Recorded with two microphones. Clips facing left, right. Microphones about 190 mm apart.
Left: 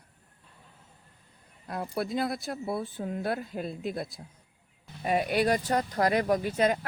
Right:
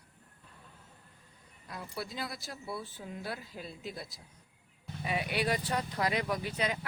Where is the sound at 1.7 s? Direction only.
55° left (ahead or behind).